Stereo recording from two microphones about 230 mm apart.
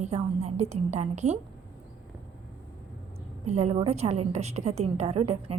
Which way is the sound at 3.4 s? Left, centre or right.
Right.